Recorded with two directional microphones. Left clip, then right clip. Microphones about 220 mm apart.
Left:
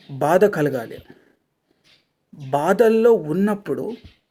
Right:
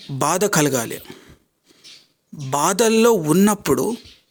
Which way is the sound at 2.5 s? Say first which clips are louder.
Left 1 dB; 40° right (ahead or behind).